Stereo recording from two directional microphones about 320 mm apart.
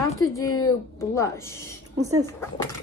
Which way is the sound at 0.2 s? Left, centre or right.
Centre.